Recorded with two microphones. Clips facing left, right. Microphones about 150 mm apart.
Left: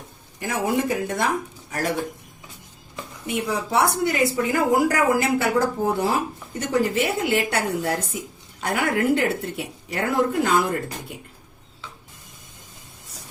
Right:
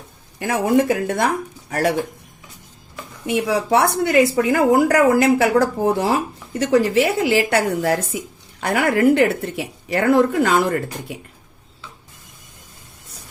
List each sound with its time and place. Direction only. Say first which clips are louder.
0.3 s speech: right 6 dB; 65° right (ahead or behind)
3.2 s speech: right 7 dB; 75° right (ahead or behind)